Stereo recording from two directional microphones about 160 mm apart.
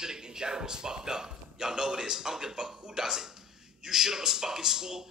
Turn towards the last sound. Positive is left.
turn(degrees=-5)  # may be behind; listen again after turning